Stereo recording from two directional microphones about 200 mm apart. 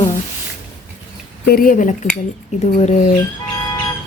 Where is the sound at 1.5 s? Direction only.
45° left (ahead or behind).